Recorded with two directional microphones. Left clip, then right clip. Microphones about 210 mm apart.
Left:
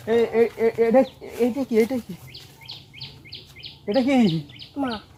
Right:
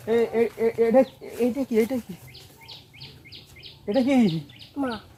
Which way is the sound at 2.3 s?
40° left (ahead or behind).